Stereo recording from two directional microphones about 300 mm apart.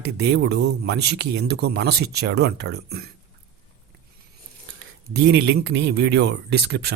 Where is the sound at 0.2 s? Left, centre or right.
Right.